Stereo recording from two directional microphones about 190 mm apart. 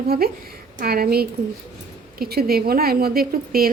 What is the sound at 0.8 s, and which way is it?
A woman's voice, 50° right (ahead or behind).